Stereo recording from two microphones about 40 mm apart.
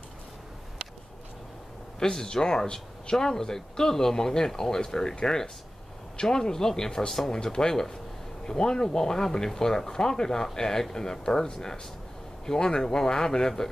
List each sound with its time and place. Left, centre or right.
2.0 s speech: centre